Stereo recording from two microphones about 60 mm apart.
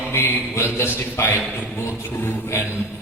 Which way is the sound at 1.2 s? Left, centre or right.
Left.